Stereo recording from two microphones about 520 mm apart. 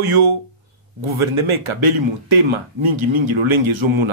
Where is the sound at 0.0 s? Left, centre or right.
Right.